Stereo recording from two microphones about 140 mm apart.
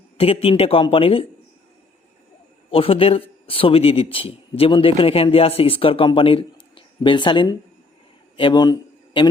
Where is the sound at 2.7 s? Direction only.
40° left (ahead or behind).